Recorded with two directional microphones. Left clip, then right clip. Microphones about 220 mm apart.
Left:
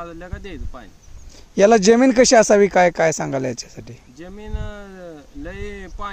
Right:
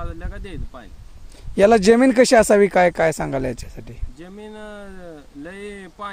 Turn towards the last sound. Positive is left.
turn(degrees=0)  # may be behind; listen again after turning